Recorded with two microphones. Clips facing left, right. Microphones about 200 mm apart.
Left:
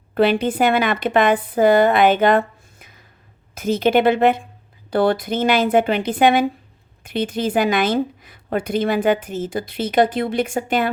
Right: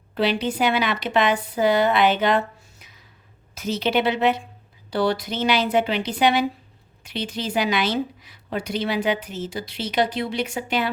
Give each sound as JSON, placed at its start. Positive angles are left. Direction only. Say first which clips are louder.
{"t": 0.1, "sound": "a woman's voice", "louder": "left 6 dB", "side_deg": 50}